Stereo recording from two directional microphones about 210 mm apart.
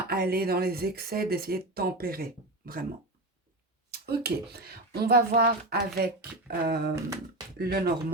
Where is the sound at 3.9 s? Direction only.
45° right (ahead or behind).